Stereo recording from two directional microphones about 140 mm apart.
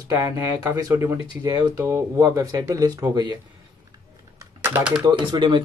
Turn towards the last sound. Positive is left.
turn(degrees=-35)  # may be behind; listen again after turning